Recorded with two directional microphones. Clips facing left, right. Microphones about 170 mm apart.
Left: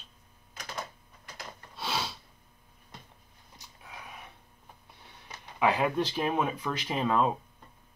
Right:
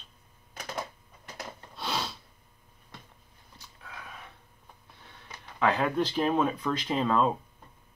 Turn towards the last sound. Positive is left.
turn(degrees=15)  # may be behind; listen again after turning